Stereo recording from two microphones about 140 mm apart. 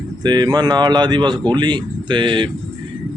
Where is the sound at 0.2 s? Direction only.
30° right (ahead or behind).